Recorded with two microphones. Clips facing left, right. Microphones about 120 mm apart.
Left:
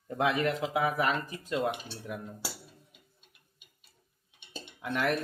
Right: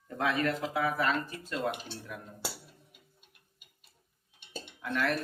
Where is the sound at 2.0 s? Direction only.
5° left (ahead or behind).